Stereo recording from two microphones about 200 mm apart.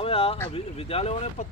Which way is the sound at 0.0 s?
30° left (ahead or behind).